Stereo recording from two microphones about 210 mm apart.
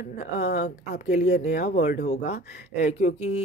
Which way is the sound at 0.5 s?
35° left (ahead or behind).